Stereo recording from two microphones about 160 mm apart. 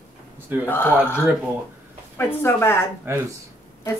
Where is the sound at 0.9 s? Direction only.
5° right (ahead or behind).